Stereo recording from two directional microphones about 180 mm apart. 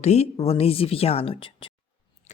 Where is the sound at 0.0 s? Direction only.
35° left (ahead or behind).